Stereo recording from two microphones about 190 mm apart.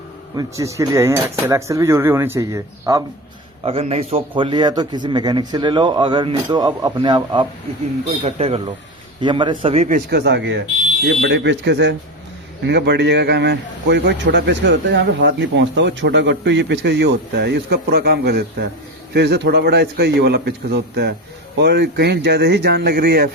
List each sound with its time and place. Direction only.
0.3 s speech: 15° right (ahead or behind)
3.6 s a man's voice: 30° right (ahead or behind)
10.1 s a man's voice: 60° right (ahead or behind)